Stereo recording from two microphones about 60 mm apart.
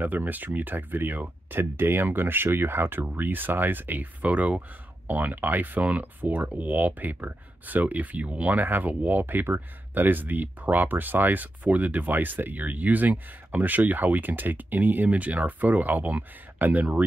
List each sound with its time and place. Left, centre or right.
0.0 s speech: right